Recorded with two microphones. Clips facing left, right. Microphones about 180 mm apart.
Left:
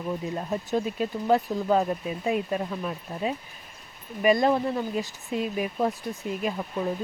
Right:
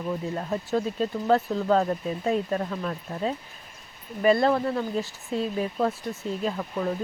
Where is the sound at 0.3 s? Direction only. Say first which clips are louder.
Even; 15° left (ahead or behind).